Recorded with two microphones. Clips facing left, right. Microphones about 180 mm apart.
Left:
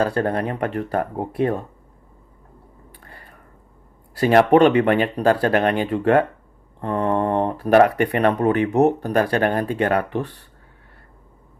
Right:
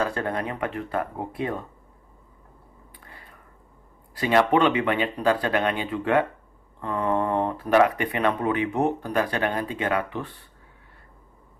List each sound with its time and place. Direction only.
0.0 s speech: 35° left (ahead or behind)
4.2 s speech: 50° left (ahead or behind)
6.8 s mantra: 45° left (ahead or behind)
7.6 s speech: 50° left (ahead or behind)